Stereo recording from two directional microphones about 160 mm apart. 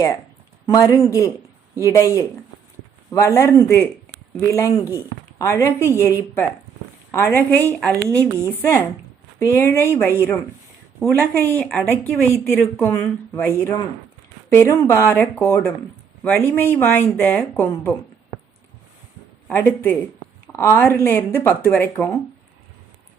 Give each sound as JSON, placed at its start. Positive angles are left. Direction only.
{"t": 0.7, "sound": "speech", "side_deg": 25}
{"t": 14.5, "sound": "speech", "side_deg": 15}
{"t": 19.5, "sound": "speech", "side_deg": 15}